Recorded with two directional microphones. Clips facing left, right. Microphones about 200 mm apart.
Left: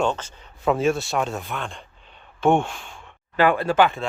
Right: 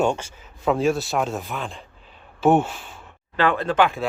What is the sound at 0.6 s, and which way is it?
Speech, centre (ahead or behind).